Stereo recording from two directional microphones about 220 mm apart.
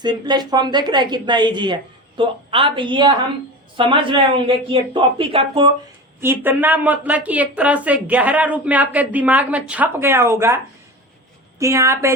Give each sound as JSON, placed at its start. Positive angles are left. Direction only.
{"t": 0.0, "sound": "a woman's voice", "side_deg": -20}
{"t": 6.2, "sound": "a woman's voice", "side_deg": -10}
{"t": 11.6, "sound": "a woman's voice", "side_deg": -15}